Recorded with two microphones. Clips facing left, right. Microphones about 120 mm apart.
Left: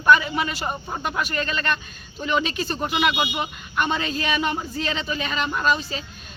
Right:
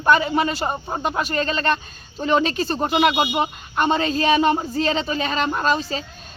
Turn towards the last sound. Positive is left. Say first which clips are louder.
# right 2 dB
turn(degrees=-35)  # may be behind; listen again after turning